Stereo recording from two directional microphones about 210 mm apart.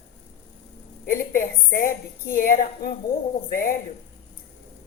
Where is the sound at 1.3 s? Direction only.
40° left (ahead or behind).